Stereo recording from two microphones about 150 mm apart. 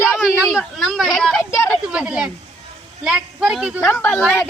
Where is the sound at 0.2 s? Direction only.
5° right (ahead or behind).